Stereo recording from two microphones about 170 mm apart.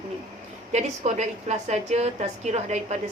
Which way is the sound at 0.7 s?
40° right (ahead or behind).